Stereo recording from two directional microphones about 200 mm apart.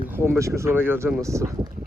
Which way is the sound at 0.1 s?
15° right (ahead or behind).